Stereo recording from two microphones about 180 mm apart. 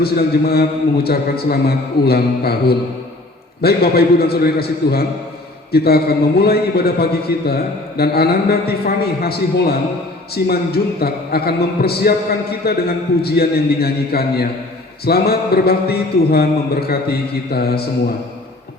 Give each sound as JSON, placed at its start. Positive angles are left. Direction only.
{"t": 0.0, "sound": "a man's voice", "side_deg": 60}